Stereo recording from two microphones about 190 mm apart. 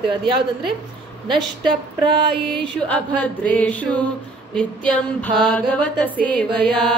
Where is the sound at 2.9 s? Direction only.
5° left (ahead or behind).